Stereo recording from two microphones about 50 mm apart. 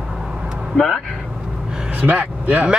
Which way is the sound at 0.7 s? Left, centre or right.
Centre.